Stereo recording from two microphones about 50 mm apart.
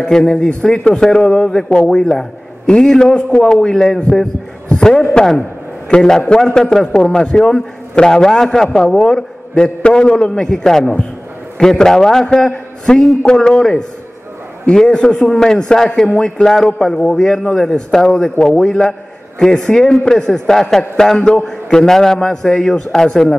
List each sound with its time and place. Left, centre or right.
0.0 s a man's voice: centre